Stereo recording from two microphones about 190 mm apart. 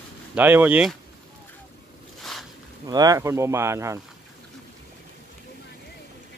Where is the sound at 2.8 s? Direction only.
20° right (ahead or behind).